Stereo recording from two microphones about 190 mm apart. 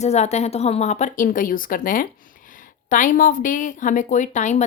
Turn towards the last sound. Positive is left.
turn(degrees=40)  # may be behind; listen again after turning